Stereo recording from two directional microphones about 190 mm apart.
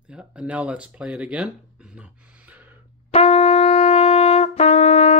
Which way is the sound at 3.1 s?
35° left (ahead or behind).